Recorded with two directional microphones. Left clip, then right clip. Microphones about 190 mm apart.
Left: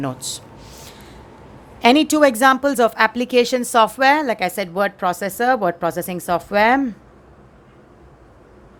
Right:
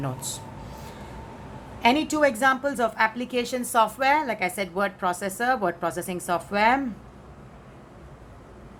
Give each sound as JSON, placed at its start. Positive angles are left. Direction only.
{"t": 0.0, "sound": "a woman's voice", "side_deg": 40}
{"t": 1.8, "sound": "a woman's voice", "side_deg": 55}